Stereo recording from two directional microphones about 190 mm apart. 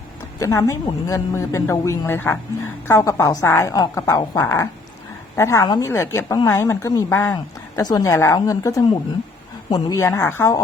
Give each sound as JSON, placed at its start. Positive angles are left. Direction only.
{"t": 0.3, "sound": "a woman's voice", "side_deg": 15}